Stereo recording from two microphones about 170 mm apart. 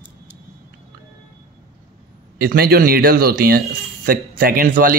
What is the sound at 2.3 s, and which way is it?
Speech, 60° right (ahead or behind).